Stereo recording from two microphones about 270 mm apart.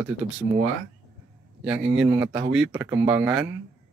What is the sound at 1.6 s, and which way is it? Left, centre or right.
Speech, centre.